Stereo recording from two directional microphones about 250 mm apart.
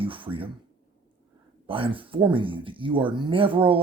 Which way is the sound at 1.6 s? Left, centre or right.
Right.